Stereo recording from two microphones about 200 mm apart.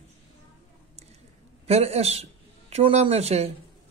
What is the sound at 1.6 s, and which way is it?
Speech, 30° right (ahead or behind).